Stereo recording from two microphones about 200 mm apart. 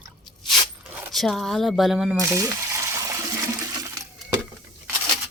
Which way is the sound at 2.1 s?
15° right (ahead or behind).